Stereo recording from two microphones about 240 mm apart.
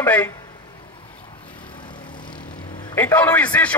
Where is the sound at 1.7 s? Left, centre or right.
Centre.